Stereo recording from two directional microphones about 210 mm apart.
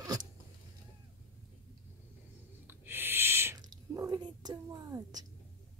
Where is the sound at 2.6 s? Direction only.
10° right (ahead or behind).